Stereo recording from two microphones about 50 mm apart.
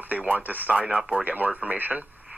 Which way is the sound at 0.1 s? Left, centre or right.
Right.